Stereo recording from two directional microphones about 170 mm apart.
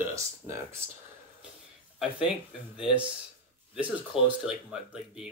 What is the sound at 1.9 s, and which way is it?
Speech, 5° right (ahead or behind).